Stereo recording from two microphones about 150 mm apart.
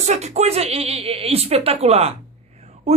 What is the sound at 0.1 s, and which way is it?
A man's voice, 50° right (ahead or behind).